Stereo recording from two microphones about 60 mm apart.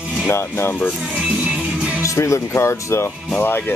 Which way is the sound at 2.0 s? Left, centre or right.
Left.